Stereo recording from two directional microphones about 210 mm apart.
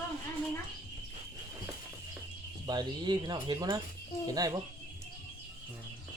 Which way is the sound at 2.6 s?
20° right (ahead or behind).